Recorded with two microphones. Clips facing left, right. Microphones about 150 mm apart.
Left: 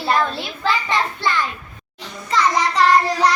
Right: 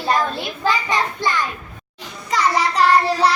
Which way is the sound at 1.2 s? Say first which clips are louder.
Even; 15° right (ahead or behind).